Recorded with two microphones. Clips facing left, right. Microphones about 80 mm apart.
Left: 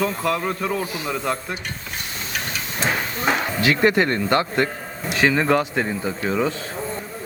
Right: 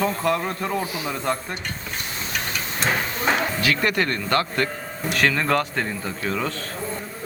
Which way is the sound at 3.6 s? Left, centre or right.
Left.